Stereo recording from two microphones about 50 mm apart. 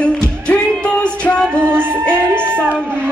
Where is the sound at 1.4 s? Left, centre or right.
Right.